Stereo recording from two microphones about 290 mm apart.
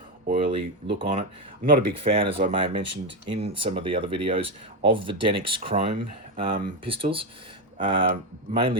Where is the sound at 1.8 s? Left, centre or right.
Centre.